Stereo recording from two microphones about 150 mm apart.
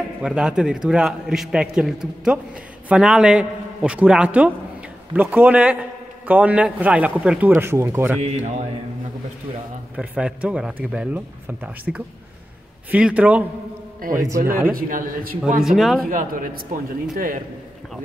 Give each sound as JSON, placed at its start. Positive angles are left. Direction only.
{"t": 0.2, "sound": "a man's voice", "side_deg": -5}
{"t": 8.2, "sound": "a man's voice", "side_deg": -50}
{"t": 9.9, "sound": "speech", "side_deg": -10}
{"t": 14.2, "sound": "speech", "side_deg": -20}
{"t": 14.7, "sound": "a man's voice", "side_deg": -70}
{"t": 15.6, "sound": "a man's voice", "side_deg": 0}
{"t": 16.1, "sound": "a man's voice", "side_deg": -65}